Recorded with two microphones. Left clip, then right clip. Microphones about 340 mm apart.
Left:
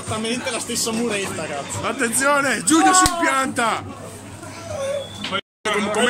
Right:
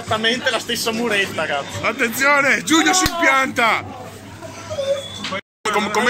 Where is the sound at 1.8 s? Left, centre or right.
Centre.